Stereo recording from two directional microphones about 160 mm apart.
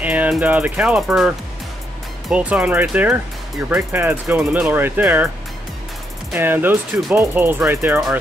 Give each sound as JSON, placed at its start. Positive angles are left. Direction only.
{"t": 0.0, "sound": "speech", "side_deg": -10}
{"t": 6.3, "sound": "speech", "side_deg": -15}